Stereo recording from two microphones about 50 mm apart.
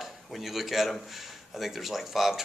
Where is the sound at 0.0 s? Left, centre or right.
Centre.